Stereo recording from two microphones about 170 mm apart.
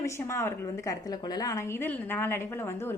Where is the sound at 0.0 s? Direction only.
15° left (ahead or behind).